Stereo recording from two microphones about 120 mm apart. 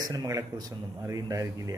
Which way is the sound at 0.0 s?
30° right (ahead or behind).